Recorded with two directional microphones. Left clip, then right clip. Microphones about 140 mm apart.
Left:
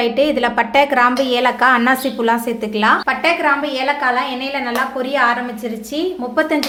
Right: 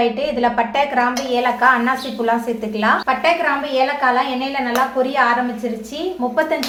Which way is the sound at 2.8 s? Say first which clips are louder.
Left 2 dB; 75° left (ahead or behind).